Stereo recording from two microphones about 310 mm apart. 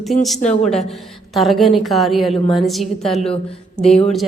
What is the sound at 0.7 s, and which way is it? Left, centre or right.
A woman's voice, centre.